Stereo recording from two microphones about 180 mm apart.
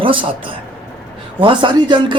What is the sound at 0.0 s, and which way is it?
Speech, 30° right (ahead or behind).